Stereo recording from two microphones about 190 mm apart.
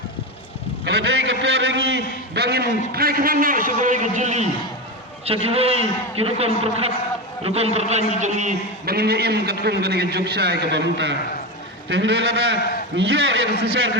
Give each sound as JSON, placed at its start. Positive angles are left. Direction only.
{"t": 0.9, "sound": "a man's voice", "side_deg": -60}